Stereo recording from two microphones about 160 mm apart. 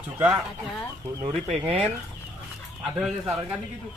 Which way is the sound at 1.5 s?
45° right (ahead or behind).